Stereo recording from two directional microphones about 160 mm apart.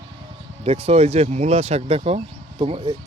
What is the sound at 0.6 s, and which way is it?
Speech, 40° right (ahead or behind).